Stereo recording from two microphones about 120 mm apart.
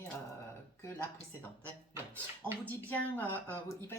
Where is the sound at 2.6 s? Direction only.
15° left (ahead or behind).